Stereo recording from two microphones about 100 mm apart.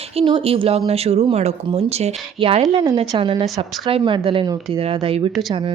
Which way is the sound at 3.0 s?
65° right (ahead or behind).